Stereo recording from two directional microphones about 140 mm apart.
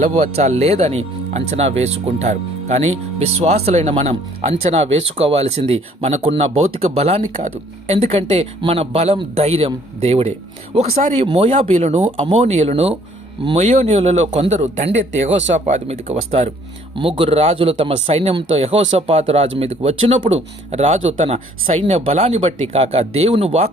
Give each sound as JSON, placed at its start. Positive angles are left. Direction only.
{"t": 0.1, "sound": "speech", "side_deg": -50}